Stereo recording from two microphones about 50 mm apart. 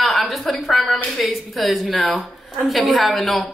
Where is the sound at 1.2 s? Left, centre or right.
Centre.